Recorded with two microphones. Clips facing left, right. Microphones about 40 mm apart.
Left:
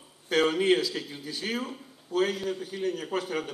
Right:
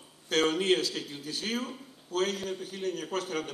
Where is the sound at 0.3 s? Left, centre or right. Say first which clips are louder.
Left 3 dB; left.